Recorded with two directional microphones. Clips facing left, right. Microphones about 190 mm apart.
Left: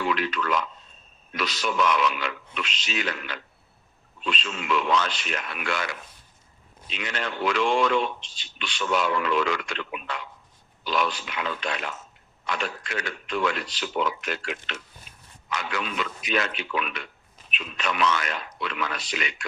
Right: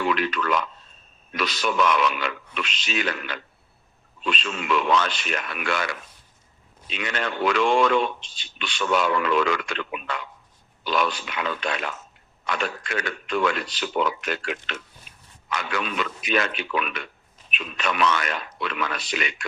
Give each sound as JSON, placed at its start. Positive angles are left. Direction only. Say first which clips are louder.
{"t": 0.0, "sound": "speech", "louder": "right 2 dB", "side_deg": -60}